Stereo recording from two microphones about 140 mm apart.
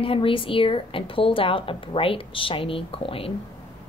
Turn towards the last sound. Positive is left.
turn(degrees=40)  # may be behind; listen again after turning